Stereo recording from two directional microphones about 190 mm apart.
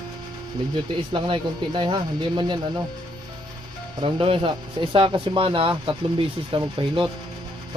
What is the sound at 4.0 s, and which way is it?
Speech, 25° right (ahead or behind).